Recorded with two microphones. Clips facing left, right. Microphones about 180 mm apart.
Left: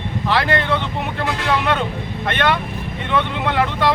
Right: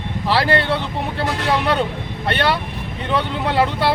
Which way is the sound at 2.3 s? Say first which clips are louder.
Even; 35° right (ahead or behind).